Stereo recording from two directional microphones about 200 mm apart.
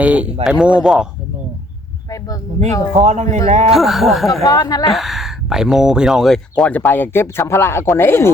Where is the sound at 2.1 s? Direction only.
15° left (ahead or behind).